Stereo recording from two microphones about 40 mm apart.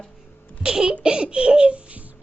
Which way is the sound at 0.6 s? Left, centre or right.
Right.